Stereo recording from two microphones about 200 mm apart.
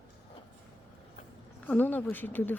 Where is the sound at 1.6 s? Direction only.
10° left (ahead or behind).